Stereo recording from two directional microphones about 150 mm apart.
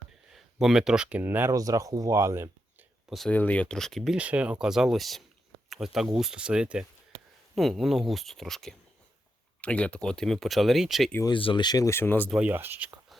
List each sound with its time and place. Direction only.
0.3 s speech: 5° right (ahead or behind)
3.1 s speech: centre (ahead or behind)
11.3 s speech: 35° left (ahead or behind); by 12.3 s 10° left (ahead or behind)
12.3 s speech: 10° right (ahead or behind)